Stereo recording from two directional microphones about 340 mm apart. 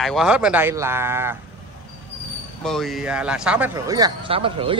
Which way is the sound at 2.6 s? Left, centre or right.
Centre.